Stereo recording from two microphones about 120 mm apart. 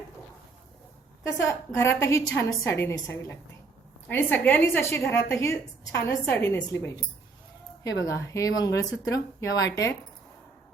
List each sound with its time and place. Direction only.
1.2 s a woman's voice: 25° left (ahead or behind)
8.0 s a woman's voice: 30° left (ahead or behind)